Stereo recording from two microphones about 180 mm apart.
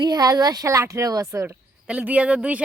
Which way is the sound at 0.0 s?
20° right (ahead or behind).